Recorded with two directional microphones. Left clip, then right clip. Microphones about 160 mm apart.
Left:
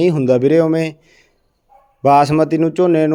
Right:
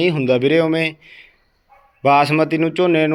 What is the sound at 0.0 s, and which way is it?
Speech, 45° left (ahead or behind).